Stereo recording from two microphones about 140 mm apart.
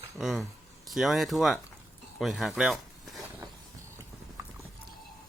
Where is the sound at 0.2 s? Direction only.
Centre (ahead or behind).